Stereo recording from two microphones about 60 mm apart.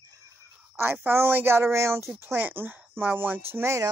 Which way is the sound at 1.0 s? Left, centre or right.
Right.